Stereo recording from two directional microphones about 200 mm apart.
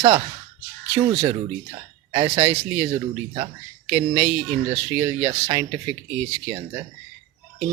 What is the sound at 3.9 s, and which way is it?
Speech, 30° right (ahead or behind).